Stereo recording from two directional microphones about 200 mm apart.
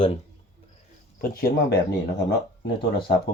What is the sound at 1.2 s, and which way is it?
Speech, 50° left (ahead or behind).